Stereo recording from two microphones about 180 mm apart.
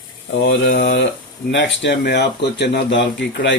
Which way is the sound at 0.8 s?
65° left (ahead or behind).